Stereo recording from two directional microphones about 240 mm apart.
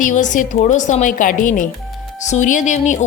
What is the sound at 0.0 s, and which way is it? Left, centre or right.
A woman's voice, left.